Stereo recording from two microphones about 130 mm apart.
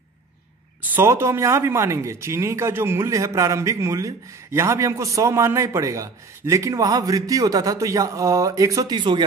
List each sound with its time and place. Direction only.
0.9 s speech: 20° right (ahead or behind); by 9.2 s 35° right (ahead or behind)